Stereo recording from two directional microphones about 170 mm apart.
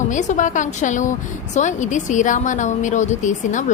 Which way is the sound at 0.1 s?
45° left (ahead or behind).